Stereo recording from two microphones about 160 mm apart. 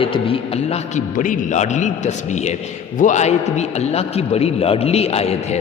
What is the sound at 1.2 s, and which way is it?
A man's voice, 50° left (ahead or behind).